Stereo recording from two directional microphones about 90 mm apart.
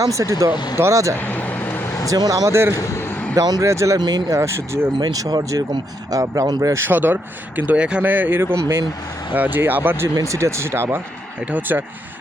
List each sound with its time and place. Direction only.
0.0 s speech: 35° right (ahead or behind)
0.5 s speech: 55° left (ahead or behind)
0.8 s speech: 35° right (ahead or behind)
1.1 s vehicle: 20° left (ahead or behind)
2.0 s speech: 40° right (ahead or behind)
2.7 s a sound: 35° left (ahead or behind)
3.3 s speech: 45° right (ahead or behind)
4.9 s speech: 45° right (ahead or behind); by 10.1 s 25° right (ahead or behind)
10.2 s speech: 35° right (ahead or behind); by 11.8 s 20° right (ahead or behind)